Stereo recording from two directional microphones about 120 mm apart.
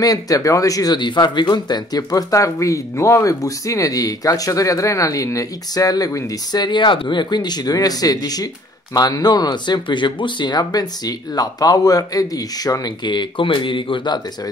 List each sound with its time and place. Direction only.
0.0 s speech: 30° left (ahead or behind)